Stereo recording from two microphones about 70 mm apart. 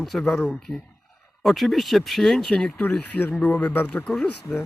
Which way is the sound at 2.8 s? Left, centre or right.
Left.